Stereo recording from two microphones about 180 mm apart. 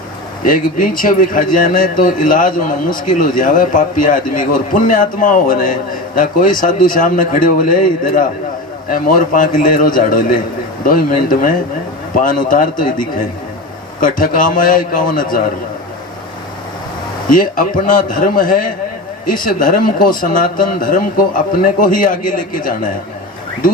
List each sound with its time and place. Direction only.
0.4 s a man's voice: 50° left (ahead or behind)
14.0 s speech: 50° left (ahead or behind)
17.3 s speech: 50° left (ahead or behind)